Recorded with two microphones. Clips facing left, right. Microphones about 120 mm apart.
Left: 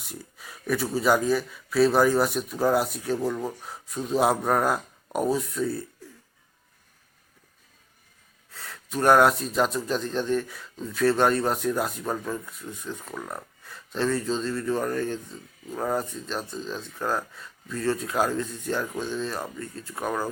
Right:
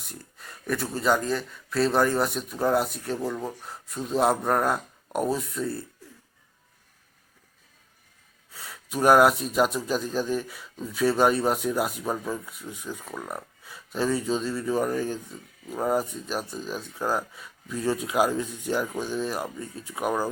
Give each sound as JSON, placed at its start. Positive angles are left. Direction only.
{"t": 0.0, "sound": "speech", "side_deg": 5}
{"t": 8.5, "sound": "speech", "side_deg": -5}